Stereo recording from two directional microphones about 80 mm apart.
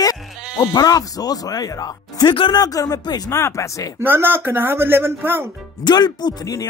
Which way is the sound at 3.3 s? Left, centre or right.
Left.